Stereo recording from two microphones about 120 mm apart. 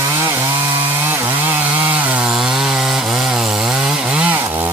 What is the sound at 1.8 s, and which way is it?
Chainsaw, 15° right (ahead or behind).